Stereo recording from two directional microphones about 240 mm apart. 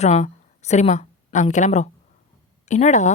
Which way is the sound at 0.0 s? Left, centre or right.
Left.